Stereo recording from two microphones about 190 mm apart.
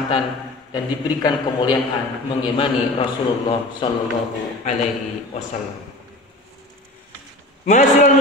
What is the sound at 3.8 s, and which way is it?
Speech, 25° left (ahead or behind).